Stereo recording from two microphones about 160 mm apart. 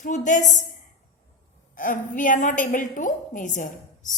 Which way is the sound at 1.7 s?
55° left (ahead or behind).